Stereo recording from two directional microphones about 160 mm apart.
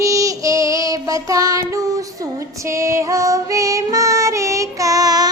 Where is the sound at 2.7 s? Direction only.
20° right (ahead or behind).